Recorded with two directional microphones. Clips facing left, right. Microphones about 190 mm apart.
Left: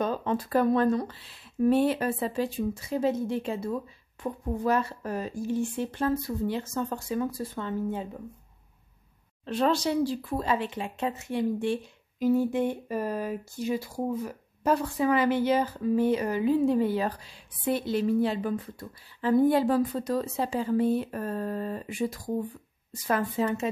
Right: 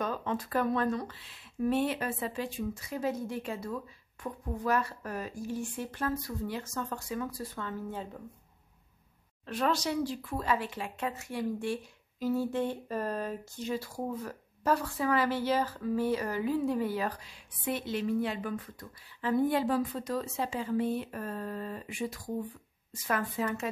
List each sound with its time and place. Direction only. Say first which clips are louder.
0.0 s speech: left 5 dB; 30° left (ahead or behind); by 8.2 s 15° left (ahead or behind)
9.5 s speech: left 5 dB; 30° left (ahead or behind)